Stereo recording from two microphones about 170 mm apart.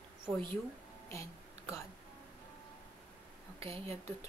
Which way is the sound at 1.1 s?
15° left (ahead or behind).